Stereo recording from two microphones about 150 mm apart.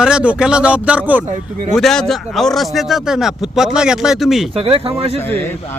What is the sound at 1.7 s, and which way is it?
Speech, centre (ahead or behind).